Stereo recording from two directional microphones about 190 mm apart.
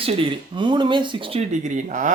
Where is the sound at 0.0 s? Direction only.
30° right (ahead or behind).